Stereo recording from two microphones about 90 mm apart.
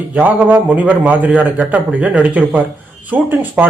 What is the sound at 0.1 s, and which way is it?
A man's voice, 20° right (ahead or behind).